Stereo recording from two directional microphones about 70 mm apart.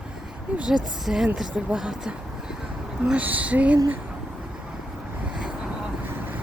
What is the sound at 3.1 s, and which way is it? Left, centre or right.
Speech, right.